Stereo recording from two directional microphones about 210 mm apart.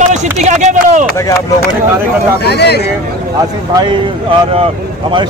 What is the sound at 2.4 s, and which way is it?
Speech, 50° left (ahead or behind).